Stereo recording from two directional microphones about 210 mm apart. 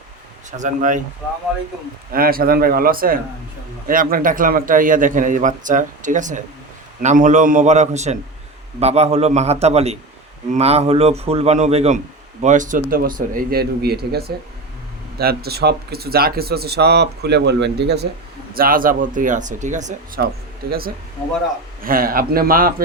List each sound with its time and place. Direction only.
0.5 s a man's voice: 35° right (ahead or behind)
2.1 s a man's voice: 45° right (ahead or behind)